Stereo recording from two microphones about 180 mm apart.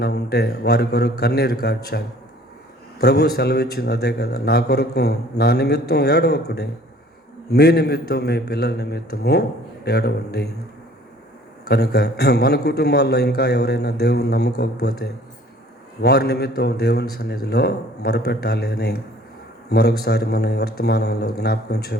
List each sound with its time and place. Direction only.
0.0 s a man's voice: 65° left (ahead or behind)
3.0 s a man's voice: 65° left (ahead or behind)
11.7 s a man's voice: 65° left (ahead or behind)